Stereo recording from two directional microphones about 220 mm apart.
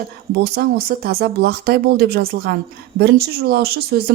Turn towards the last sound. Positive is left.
turn(degrees=-45)  # may be behind; listen again after turning